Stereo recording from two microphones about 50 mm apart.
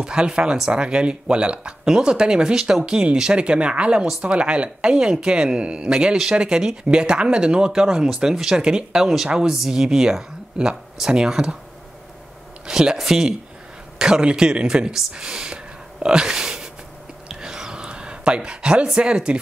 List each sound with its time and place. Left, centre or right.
0.0 s speech: centre
12.6 s speech: centre
17.3 s a sound: centre